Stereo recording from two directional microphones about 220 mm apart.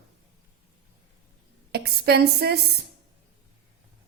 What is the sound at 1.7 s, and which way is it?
A woman's voice, 45° right (ahead or behind).